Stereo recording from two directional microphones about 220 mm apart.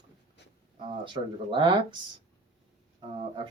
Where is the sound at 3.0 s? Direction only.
20° right (ahead or behind).